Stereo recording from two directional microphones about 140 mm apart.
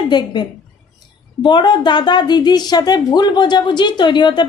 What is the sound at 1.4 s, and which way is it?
A woman's voice, 30° left (ahead or behind).